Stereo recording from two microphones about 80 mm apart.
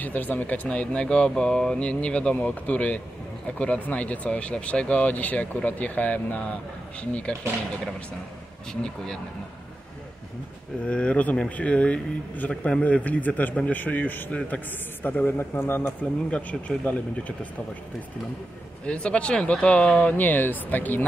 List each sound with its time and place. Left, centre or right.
0.0 s speech: left
8.8 s speech: centre
10.9 s speech: centre
16.3 s speech: centre
18.9 s speech: centre